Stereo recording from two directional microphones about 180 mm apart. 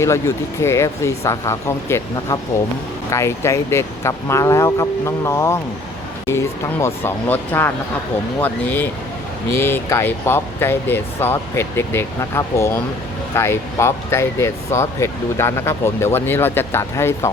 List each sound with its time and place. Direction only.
0.0 s speech: 15° left (ahead or behind)
6.8 s speech: 10° left (ahead or behind)